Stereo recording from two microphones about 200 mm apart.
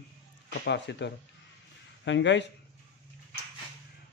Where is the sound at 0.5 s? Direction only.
60° left (ahead or behind).